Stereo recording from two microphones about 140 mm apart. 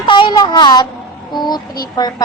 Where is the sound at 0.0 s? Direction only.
35° left (ahead or behind).